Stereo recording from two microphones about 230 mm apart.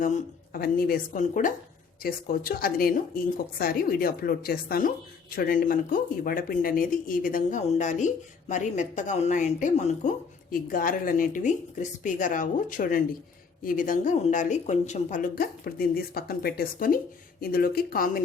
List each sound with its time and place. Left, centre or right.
0.0 s speech: left